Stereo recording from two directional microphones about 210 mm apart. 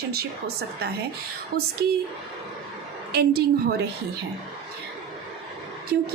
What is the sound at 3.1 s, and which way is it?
Speech, 50° right (ahead or behind).